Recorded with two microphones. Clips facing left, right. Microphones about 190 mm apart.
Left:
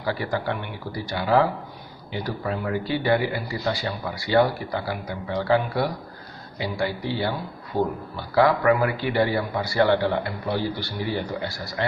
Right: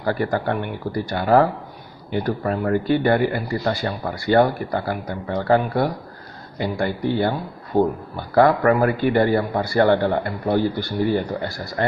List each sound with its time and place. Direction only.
0.0 s a man's voice: 50° right (ahead or behind)